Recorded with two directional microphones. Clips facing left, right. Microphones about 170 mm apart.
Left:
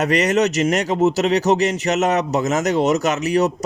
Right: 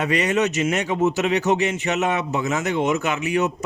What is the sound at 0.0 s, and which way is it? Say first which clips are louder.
Speech: left 3 dB; 40° left (ahead or behind).